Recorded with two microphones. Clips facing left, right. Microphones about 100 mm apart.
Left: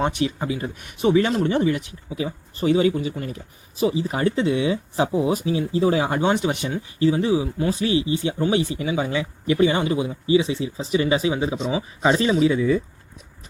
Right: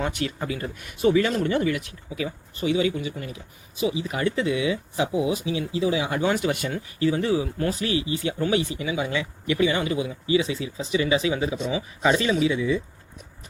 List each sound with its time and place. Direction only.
0.0 s speech: 20° left (ahead or behind); by 12.8 s 40° left (ahead or behind)